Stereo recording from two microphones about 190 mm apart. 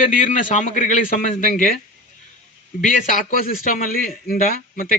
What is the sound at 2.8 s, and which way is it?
A man's voice, 45° left (ahead or behind).